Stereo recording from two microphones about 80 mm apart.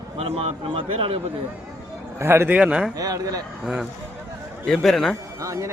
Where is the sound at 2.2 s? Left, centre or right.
Right.